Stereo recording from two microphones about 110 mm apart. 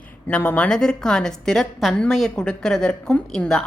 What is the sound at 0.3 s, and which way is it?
A woman's voice, 10° left (ahead or behind).